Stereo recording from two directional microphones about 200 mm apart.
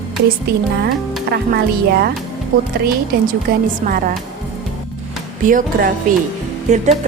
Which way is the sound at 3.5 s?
45° right (ahead or behind).